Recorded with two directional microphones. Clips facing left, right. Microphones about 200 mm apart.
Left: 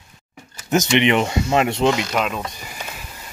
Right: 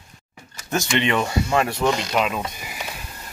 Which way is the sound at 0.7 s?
20° left (ahead or behind).